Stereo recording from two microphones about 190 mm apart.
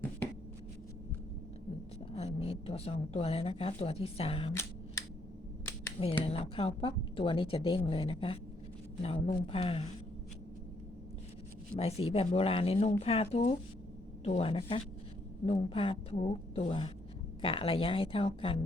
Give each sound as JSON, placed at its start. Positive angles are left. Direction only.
{"t": 2.1, "sound": "a woman's voice", "side_deg": 30}
{"t": 6.2, "sound": "a woman's voice", "side_deg": 30}
{"t": 11.8, "sound": "a woman's voice", "side_deg": 30}